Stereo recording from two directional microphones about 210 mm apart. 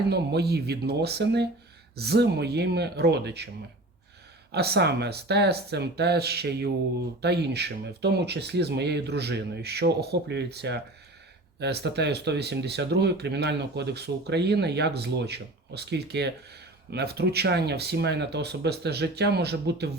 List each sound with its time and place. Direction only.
0.1 s speech: 50° right (ahead or behind)
4.5 s speech: 50° right (ahead or behind)